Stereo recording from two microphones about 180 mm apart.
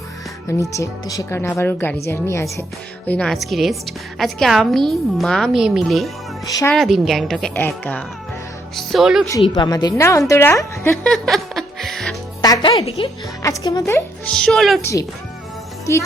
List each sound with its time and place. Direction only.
0.4 s a woman's voice: 15° left (ahead or behind); by 6.1 s centre (ahead or behind)
6.4 s speech: 20° left (ahead or behind)
6.7 s a woman's voice: centre (ahead or behind)
9.4 s speech: 25° left (ahead or behind)
11.0 s music: centre (ahead or behind)
12.4 s music: 20° left (ahead or behind)
13.0 s a woman's voice: 30° left (ahead or behind)
13.4 s speech: 20° left (ahead or behind)
14.3 s a woman's voice: 5° left (ahead or behind)
14.8 s speech: 15° left (ahead or behind)